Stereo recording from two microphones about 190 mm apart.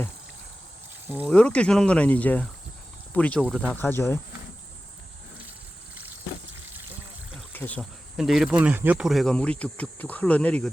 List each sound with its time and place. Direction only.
1.0 s speech: 10° right (ahead or behind)
1.3 s speech: 5° left (ahead or behind)
7.5 s a sound: 10° left (ahead or behind)
7.8 s speech: centre (ahead or behind)